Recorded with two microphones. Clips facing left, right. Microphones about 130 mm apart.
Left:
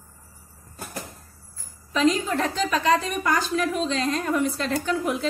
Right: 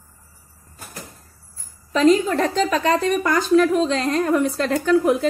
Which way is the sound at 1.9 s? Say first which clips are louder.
Right 6 dB; 40° right (ahead or behind).